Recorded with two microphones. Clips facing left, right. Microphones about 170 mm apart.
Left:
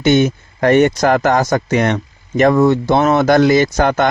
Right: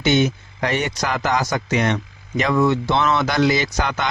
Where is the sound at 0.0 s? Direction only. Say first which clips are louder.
Left 5 dB; 50° left (ahead or behind).